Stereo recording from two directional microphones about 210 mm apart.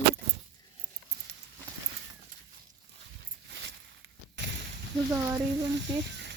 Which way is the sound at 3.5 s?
60° right (ahead or behind).